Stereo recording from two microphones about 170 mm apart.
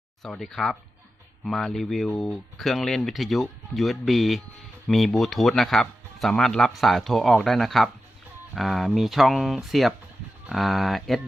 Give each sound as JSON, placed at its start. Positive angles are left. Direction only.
{"t": 0.2, "sound": "speech", "side_deg": 0}